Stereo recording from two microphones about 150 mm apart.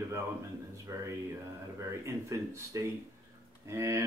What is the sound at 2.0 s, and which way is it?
Speech, 20° right (ahead or behind).